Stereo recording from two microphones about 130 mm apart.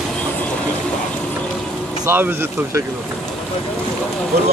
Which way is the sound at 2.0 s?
15° right (ahead or behind).